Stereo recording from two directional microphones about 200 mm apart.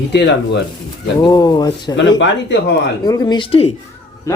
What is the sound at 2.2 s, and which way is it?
Speech, 60° left (ahead or behind).